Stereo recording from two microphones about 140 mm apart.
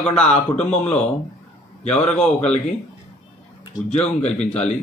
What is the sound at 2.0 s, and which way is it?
Speech, 55° left (ahead or behind).